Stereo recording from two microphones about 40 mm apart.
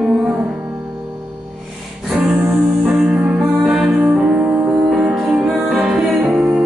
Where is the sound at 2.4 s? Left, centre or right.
Centre.